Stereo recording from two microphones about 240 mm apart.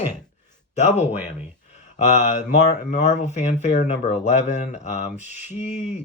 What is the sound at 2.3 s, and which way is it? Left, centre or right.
Speech, left.